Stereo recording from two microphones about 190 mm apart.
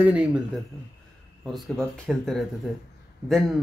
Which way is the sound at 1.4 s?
Centre (ahead or behind).